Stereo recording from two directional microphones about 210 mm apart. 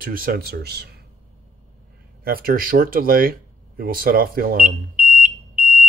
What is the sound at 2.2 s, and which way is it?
Speech, 45° right (ahead or behind).